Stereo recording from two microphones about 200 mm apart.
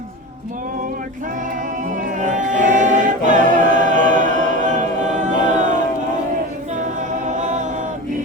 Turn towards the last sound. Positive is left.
turn(degrees=-40)  # may be behind; listen again after turning